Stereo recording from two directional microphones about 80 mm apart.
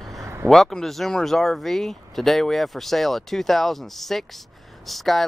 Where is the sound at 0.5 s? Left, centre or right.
Centre.